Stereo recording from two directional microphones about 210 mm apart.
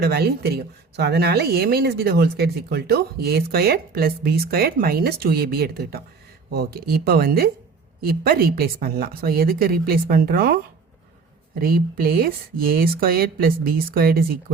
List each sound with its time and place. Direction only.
0.0 s speech: 50° right (ahead or behind)
11.6 s speech: 45° right (ahead or behind)